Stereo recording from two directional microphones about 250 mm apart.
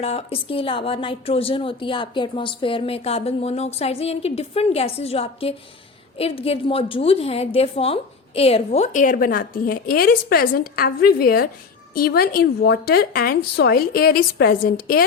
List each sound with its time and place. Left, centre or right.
0.0 s a woman's voice: left